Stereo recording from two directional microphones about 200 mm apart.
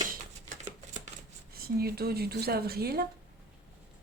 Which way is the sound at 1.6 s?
50° right (ahead or behind).